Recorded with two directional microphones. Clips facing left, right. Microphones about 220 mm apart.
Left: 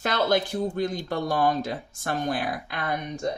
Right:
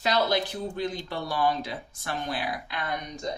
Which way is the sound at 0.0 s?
50° left (ahead or behind).